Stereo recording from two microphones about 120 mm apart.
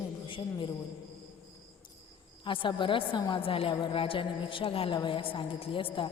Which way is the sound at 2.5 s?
45° left (ahead or behind).